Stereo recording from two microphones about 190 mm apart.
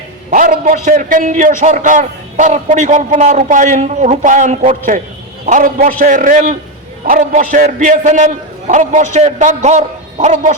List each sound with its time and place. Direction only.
0.3 s a man's voice: 50° right (ahead or behind)